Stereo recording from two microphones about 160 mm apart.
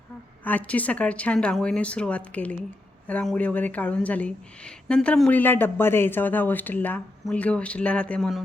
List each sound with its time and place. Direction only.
0.4 s speech: 10° left (ahead or behind)